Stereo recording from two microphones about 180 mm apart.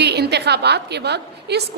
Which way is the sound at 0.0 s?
65° right (ahead or behind).